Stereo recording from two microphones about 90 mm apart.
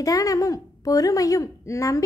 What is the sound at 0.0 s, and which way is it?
A woman's voice, 40° left (ahead or behind).